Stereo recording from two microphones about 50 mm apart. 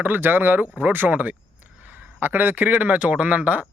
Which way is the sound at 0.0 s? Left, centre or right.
Right.